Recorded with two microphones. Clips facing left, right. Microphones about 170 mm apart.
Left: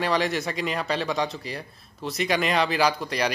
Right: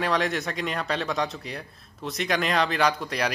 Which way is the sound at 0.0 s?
Centre (ahead or behind).